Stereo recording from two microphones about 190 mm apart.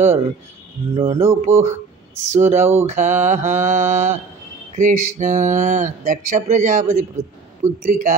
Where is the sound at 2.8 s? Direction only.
40° right (ahead or behind).